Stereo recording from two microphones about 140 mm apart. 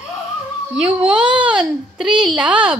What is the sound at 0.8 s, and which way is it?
A woman's voice, 10° right (ahead or behind).